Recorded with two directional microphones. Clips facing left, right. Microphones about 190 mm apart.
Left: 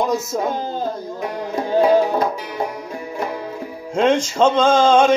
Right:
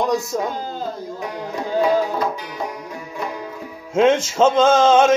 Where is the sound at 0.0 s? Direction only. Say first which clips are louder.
Even; centre (ahead or behind).